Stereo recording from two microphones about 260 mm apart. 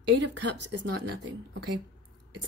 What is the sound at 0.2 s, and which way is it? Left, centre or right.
Speech, right.